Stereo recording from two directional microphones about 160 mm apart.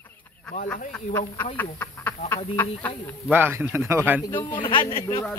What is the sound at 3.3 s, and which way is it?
Speech, 10° right (ahead or behind).